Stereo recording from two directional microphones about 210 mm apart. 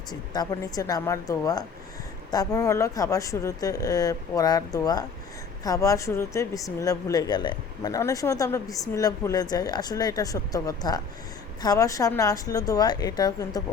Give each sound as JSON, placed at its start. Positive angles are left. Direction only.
{"t": 0.1, "sound": "speech", "side_deg": 20}